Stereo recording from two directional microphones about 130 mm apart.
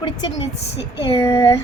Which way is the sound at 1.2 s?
20° left (ahead or behind).